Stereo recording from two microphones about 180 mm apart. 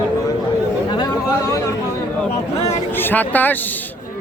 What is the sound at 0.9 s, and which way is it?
Chatter, 20° left (ahead or behind).